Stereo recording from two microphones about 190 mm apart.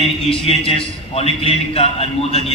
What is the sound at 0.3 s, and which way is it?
A man's voice, 30° left (ahead or behind).